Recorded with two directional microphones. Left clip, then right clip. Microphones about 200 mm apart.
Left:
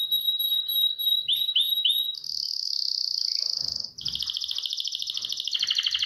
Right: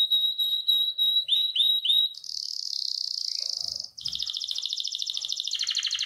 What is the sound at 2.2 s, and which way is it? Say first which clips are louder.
Cricket: left 3 dB; 30° right (ahead or behind).